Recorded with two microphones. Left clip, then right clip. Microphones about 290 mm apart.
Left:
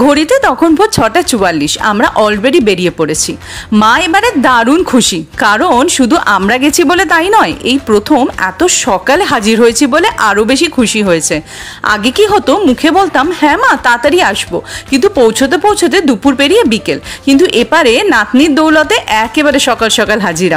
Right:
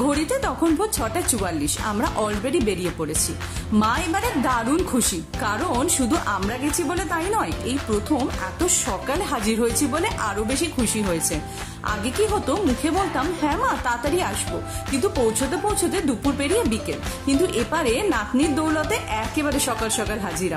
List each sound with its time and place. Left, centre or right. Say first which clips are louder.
0.0 s a woman's voice: left 15 dB; right
15.5 s a woman's voice: left 15 dB; right